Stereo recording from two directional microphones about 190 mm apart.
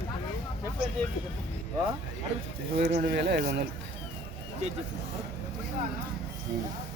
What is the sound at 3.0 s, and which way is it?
Speech, 60° right (ahead or behind).